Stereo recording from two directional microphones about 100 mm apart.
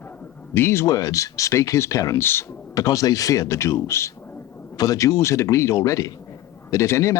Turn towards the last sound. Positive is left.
turn(degrees=30)  # may be behind; listen again after turning